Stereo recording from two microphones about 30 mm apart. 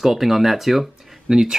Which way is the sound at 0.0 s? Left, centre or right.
Centre.